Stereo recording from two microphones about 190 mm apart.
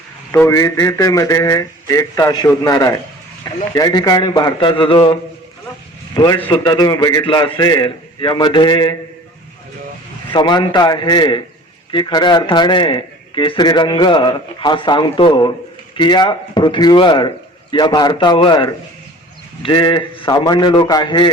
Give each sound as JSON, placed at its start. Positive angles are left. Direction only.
{"t": 0.3, "sound": "a man's voice", "side_deg": 15}
{"t": 6.1, "sound": "a man's voice", "side_deg": 20}
{"t": 10.3, "sound": "a man's voice", "side_deg": 25}